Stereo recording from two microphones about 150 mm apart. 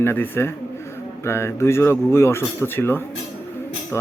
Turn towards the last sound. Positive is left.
turn(degrees=15)  # may be behind; listen again after turning